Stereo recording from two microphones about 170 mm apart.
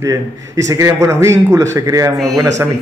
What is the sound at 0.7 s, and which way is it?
A man's voice, 15° right (ahead or behind).